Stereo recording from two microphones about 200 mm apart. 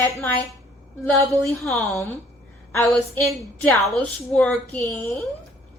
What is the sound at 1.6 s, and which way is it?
Speech, centre (ahead or behind).